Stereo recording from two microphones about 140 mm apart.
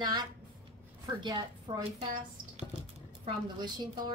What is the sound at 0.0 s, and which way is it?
Speech, 30° right (ahead or behind).